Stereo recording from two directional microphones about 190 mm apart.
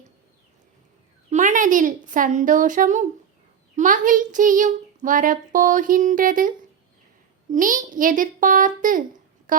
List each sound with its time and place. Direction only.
1.3 s a woman's voice: 40° right (ahead or behind)
7.5 s speech: 45° right (ahead or behind)
9.5 s a sound: 45° right (ahead or behind)